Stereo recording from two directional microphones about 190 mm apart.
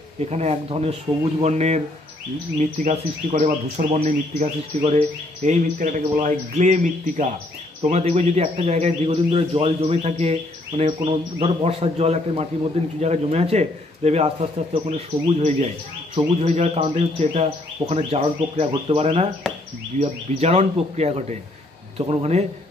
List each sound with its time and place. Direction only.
0.2 s a man's voice: 35° right (ahead or behind)
2.8 s a man's voice: 35° right (ahead or behind)
19.4 s a sound: centre (ahead or behind)
20.0 s a man's voice: 35° right (ahead or behind)